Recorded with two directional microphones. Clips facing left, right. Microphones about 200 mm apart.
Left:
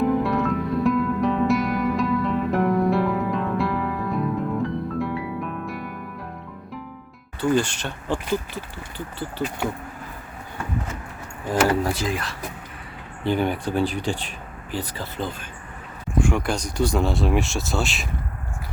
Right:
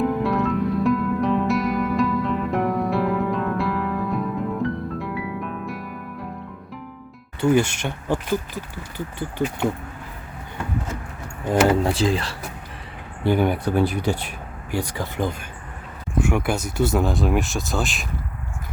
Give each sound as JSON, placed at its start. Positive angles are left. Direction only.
{"t": 0.2, "sound": "music", "side_deg": 0}
{"t": 7.4, "sound": "speech", "side_deg": -10}
{"t": 11.4, "sound": "speech", "side_deg": -25}
{"t": 13.2, "sound": "speech", "side_deg": -10}